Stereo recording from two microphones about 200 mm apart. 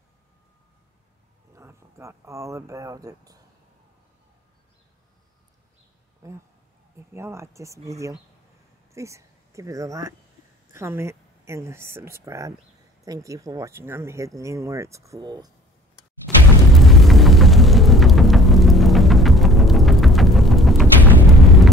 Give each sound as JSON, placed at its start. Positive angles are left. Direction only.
{"t": 1.5, "sound": "speech", "side_deg": -15}
{"t": 6.2, "sound": "speech", "side_deg": -15}
{"t": 16.3, "sound": "music", "side_deg": 0}